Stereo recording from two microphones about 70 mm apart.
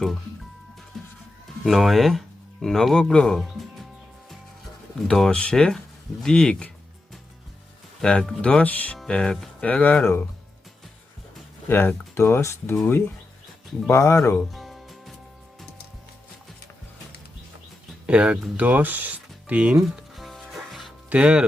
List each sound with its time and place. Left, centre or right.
0.9 s music: centre
1.6 s speech: centre
4.3 s music: centre
5.0 s speech: centre
8.0 s speech: centre
9.0 s speech: centre
9.6 s speech: centre
11.7 s speech: left
13.8 s speech: left
14.5 s music: centre
18.0 s speech: centre
20.1 s music: centre
21.1 s speech: centre